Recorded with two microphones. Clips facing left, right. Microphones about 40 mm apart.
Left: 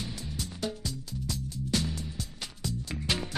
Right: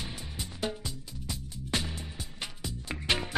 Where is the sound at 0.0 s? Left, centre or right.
Right.